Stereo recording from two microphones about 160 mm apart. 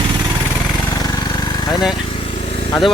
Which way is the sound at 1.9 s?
35° left (ahead or behind).